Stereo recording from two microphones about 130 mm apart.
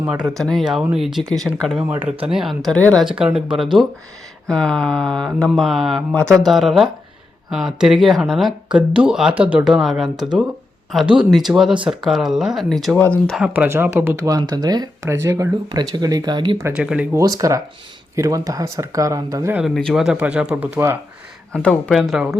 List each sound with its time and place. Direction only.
0.0 s speech: 10° right (ahead or behind)
0.3 s speech: 5° left (ahead or behind)
1.9 s speech: 10° right (ahead or behind)
2.6 s speech: 5° left (ahead or behind)
3.0 s speech: 5° right (ahead or behind)
13.0 s speech: 10° left (ahead or behind)
13.5 s speech: 15° right (ahead or behind); by 16.6 s 35° right (ahead or behind)
16.7 s speech: 5° right (ahead or behind)
17.2 s speech: 25° right (ahead or behind)
19.7 s speech: centre (ahead or behind)
21.5 s speech: 5° left (ahead or behind)